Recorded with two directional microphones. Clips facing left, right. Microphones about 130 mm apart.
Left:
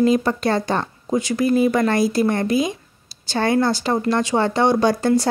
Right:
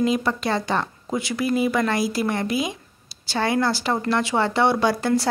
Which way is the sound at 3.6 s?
20° left (ahead or behind).